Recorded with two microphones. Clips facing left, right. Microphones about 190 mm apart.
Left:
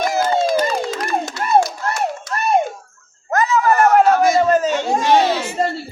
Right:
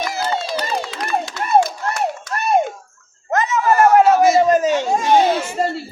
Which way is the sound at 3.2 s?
20° right (ahead or behind).